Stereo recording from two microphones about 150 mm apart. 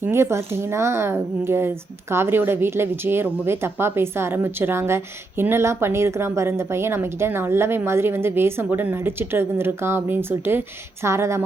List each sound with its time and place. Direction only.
0.0 s speech: 15° right (ahead or behind)